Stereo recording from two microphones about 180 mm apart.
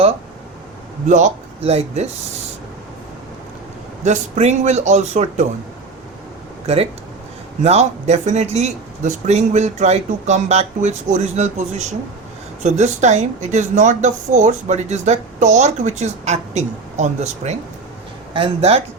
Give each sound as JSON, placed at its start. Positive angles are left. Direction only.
{"t": 1.0, "sound": "speech", "side_deg": -40}
{"t": 4.0, "sound": "speech", "side_deg": -40}
{"t": 6.7, "sound": "speech", "side_deg": -35}